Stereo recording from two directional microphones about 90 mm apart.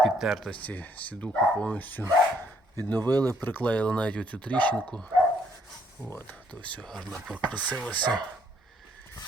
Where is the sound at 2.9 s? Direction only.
45° right (ahead or behind).